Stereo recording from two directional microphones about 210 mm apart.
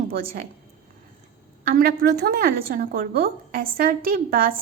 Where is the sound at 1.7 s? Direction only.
45° right (ahead or behind).